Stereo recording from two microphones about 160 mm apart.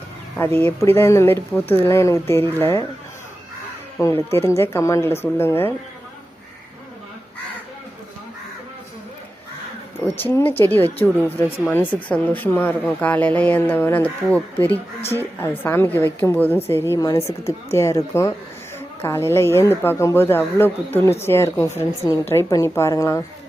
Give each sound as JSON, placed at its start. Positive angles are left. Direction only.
{"t": 0.3, "sound": "speech", "side_deg": 15}
{"t": 4.3, "sound": "speech", "side_deg": 15}
{"t": 10.1, "sound": "speech", "side_deg": 15}